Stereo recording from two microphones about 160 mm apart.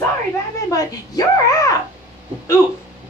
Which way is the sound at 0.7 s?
20° left (ahead or behind).